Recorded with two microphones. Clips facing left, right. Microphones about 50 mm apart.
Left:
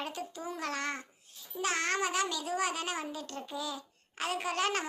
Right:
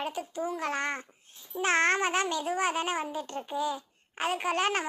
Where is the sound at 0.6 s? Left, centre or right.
Right.